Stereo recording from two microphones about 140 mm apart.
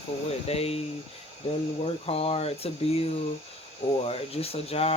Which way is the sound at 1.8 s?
45° left (ahead or behind).